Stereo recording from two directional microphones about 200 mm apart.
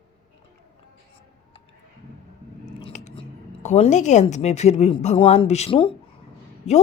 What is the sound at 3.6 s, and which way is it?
Speech, 35° left (ahead or behind).